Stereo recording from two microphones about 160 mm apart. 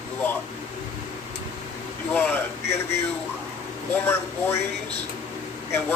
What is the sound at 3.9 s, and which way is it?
Speech, 15° left (ahead or behind).